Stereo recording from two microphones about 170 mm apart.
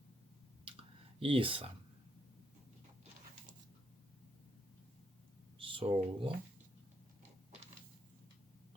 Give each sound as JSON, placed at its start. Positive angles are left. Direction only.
{"t": 1.2, "sound": "speech", "side_deg": -30}
{"t": 5.5, "sound": "speech", "side_deg": -30}